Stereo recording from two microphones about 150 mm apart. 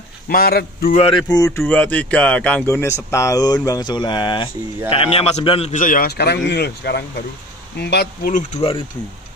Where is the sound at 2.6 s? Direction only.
20° left (ahead or behind); by 5.8 s 40° left (ahead or behind).